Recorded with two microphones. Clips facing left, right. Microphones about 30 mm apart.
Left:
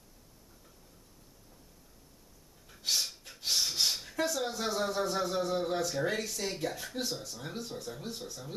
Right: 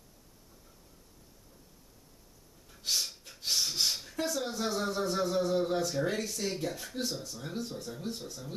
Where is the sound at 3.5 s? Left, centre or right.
Centre.